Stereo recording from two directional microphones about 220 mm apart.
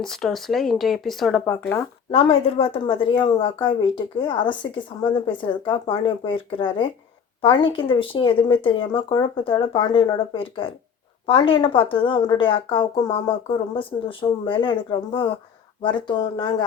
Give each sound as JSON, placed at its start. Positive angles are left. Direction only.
{"t": 0.0, "sound": "speech", "side_deg": 0}
{"t": 2.0, "sound": "speech", "side_deg": 25}